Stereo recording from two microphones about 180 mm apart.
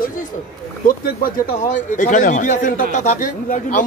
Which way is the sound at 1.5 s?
45° left (ahead or behind).